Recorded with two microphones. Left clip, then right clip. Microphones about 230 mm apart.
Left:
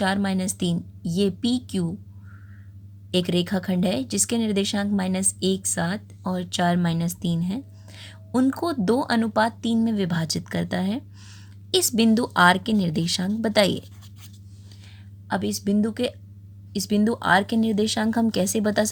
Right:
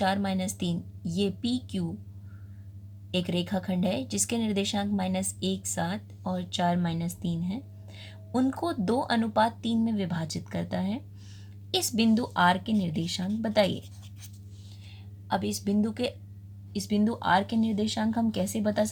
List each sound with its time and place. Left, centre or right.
0.0 s speech: left
3.1 s speech: left
15.3 s speech: left